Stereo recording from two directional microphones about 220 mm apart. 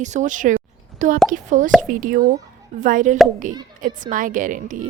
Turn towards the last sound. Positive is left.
turn(degrees=-35)  # may be behind; listen again after turning